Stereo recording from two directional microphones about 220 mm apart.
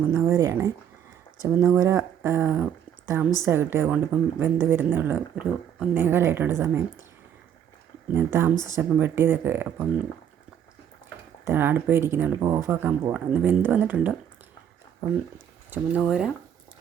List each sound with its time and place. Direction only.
0.1 s speech: 15° right (ahead or behind)
8.1 s speech: 10° right (ahead or behind)
11.4 s speech: 10° right (ahead or behind)
15.7 s speech: 5° right (ahead or behind)